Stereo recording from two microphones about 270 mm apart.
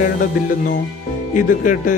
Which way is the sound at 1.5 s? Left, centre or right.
Left.